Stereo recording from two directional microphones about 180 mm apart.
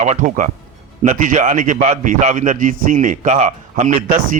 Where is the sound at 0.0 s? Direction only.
45° right (ahead or behind).